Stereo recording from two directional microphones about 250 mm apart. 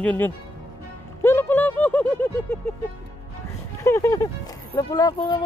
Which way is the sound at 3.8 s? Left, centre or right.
Centre.